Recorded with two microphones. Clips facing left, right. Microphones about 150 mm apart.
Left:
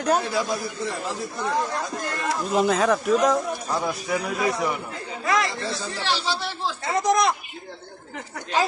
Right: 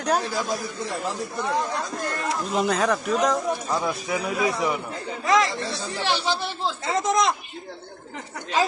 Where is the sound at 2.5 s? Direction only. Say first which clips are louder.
Left 3 dB; centre (ahead or behind).